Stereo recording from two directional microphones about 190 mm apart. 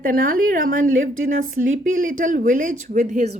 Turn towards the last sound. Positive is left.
turn(degrees=-40)  # may be behind; listen again after turning